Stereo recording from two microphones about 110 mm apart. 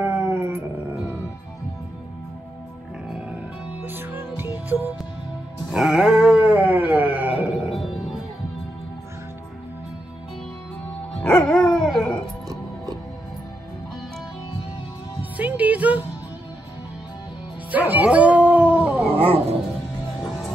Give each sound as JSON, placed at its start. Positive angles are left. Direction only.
{"t": 0.0, "sound": "dog", "side_deg": -20}
{"t": 3.1, "sound": "music", "side_deg": -10}
{"t": 3.8, "sound": "music", "side_deg": -20}
{"t": 5.7, "sound": "a sound", "side_deg": -5}
{"t": 11.4, "sound": "dog", "side_deg": 5}
{"t": 12.4, "sound": "music", "side_deg": -35}
{"t": 15.3, "sound": "music", "side_deg": -15}
{"t": 17.6, "sound": "music", "side_deg": -15}
{"t": 19.1, "sound": "dog", "side_deg": -60}
{"t": 20.2, "sound": "music", "side_deg": 0}